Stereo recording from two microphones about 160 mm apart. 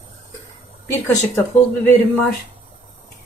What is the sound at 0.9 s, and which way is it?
Speech, 15° left (ahead or behind).